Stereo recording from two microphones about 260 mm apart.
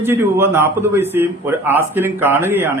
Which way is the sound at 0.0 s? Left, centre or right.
Centre.